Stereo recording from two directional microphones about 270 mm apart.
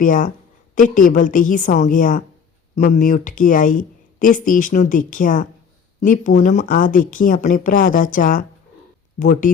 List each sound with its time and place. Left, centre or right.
0.0 s a woman's voice: left